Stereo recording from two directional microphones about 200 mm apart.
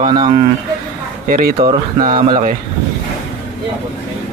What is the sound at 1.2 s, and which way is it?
Speech, 45° right (ahead or behind).